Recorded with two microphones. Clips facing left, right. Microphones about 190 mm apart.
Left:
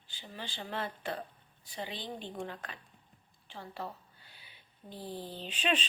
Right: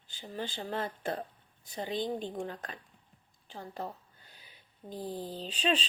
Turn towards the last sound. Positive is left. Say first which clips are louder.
# right 2 dB
turn(degrees=-35)  # may be behind; listen again after turning